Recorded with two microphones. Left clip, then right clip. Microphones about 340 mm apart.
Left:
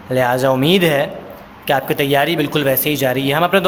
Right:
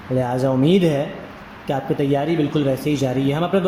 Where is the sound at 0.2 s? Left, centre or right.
Left.